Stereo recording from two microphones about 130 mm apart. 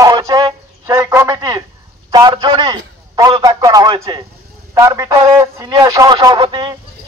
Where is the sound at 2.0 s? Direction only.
30° right (ahead or behind).